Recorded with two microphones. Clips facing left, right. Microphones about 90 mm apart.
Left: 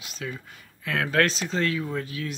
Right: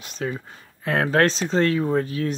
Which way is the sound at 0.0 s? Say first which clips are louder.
Right 7 dB; 40° right (ahead or behind).